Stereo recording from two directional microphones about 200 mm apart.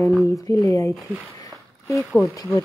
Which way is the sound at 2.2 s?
15° left (ahead or behind).